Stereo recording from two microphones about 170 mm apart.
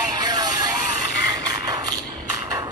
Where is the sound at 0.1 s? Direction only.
25° right (ahead or behind).